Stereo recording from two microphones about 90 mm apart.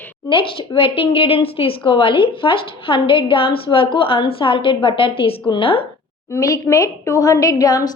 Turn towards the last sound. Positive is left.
turn(degrees=45)  # may be behind; listen again after turning